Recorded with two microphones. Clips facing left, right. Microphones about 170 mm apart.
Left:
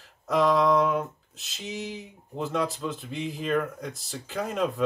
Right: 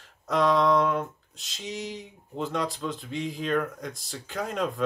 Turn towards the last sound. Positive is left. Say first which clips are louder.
# left 2 dB
turn(degrees=0)  # may be behind; listen again after turning